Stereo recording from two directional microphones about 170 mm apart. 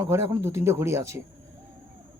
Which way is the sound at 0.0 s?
15° right (ahead or behind).